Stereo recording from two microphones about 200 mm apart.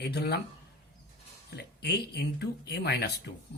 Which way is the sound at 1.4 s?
55° left (ahead or behind).